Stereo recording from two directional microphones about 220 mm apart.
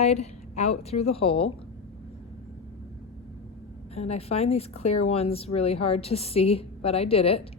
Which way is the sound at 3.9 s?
30° left (ahead or behind).